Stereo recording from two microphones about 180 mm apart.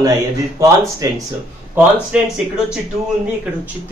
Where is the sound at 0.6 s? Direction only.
20° right (ahead or behind).